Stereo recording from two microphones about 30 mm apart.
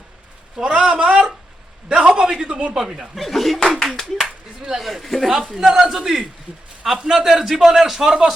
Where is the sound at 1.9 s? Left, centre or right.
Right.